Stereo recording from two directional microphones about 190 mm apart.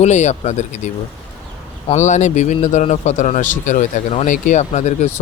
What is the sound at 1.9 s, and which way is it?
A man's voice, 40° left (ahead or behind).